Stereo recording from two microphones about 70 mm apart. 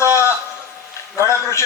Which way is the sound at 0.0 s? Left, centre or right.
Left.